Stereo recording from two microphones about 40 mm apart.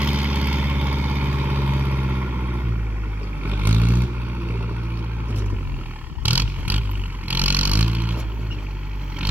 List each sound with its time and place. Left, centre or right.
0.0 s vehicle: right
3.4 s vehicle: right
6.2 s vehicle: right